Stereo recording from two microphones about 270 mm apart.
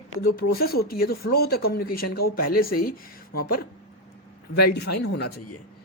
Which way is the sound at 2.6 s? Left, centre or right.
Left.